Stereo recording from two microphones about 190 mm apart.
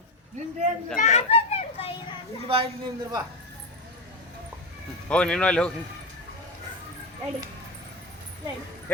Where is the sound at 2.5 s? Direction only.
30° right (ahead or behind).